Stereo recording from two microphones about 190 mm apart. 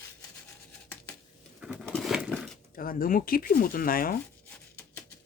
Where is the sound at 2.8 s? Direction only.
50° left (ahead or behind).